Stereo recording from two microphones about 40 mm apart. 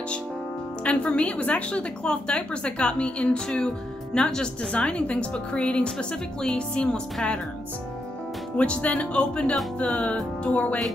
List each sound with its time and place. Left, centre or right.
0.8 s speech: left
3.4 s speech: centre
8.5 s speech: left